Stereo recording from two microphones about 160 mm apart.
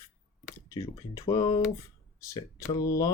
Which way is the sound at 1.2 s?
30° left (ahead or behind).